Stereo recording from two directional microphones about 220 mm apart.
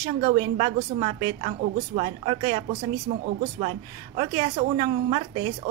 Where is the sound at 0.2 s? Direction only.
25° right (ahead or behind).